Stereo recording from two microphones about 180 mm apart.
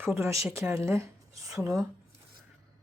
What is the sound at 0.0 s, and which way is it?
Speech, 15° right (ahead or behind).